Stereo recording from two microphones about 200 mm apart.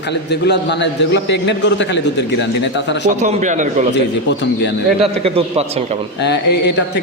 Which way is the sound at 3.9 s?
60° left (ahead or behind).